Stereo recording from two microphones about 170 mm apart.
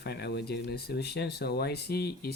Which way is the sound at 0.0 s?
75° left (ahead or behind).